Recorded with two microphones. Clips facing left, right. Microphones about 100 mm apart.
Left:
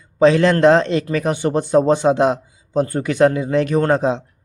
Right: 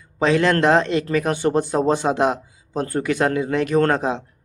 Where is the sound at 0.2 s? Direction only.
30° left (ahead or behind).